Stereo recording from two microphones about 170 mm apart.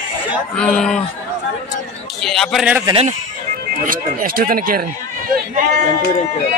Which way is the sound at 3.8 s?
55° right (ahead or behind).